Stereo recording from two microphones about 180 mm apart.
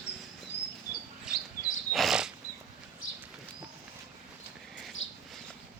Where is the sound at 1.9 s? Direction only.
Centre (ahead or behind).